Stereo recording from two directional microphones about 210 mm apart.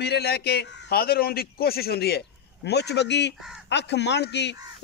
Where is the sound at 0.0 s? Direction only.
50° left (ahead or behind).